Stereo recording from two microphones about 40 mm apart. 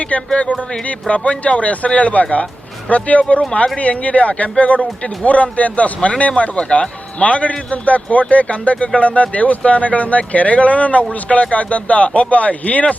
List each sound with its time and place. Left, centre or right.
0.1 s speech: left